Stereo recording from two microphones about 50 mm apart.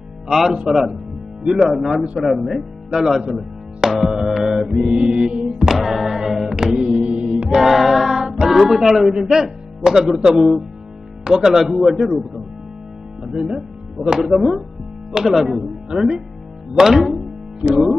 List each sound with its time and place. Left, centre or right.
0.3 s mantra: centre
1.5 s speech: centre
2.9 s mantra: centre
3.3 s music: centre
4.3 s mantra: centre
5.6 s music: centre
7.4 s female singing: centre
11.2 s mantra: centre
13.2 s speech: centre
15.1 s mantra: centre